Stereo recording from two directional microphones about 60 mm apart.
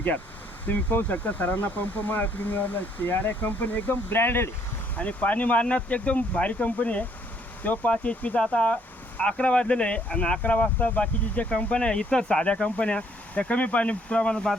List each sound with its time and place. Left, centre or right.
0.7 s speech: left
4.9 s speech: left